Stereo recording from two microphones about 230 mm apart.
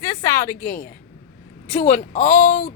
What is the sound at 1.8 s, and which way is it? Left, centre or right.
Speech, left.